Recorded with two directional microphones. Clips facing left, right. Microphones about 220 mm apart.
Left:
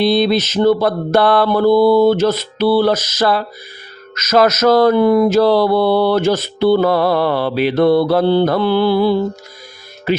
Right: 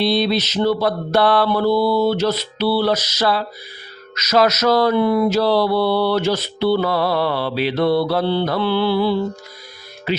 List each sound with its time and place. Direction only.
0.0 s mantra: 50° left (ahead or behind)
10.1 s speech: 50° left (ahead or behind)